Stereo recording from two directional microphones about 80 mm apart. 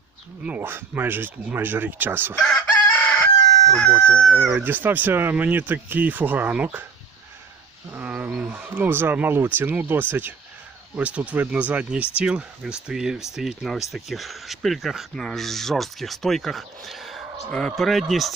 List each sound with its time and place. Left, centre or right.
0.4 s speech: right
2.4 s chicken: centre
3.7 s speech: centre
3.9 s speech: right
4.3 s speech: centre
4.6 s speech: right
7.9 s speech: right; by 18.3 s centre